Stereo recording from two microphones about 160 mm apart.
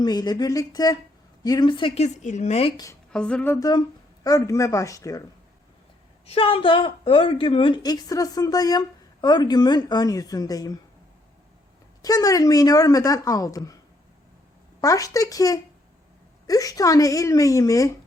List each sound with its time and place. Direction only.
0.0 s a woman's voice: 25° left (ahead or behind)
2.0 s speech: 45° left (ahead or behind)
3.1 s speech: 5° left (ahead or behind)
3.7 s a woman's voice: 25° left (ahead or behind)
6.2 s a woman's voice: 35° left (ahead or behind)
12.0 s a woman's voice: 20° left (ahead or behind)
14.8 s a woman's voice: 20° left (ahead or behind)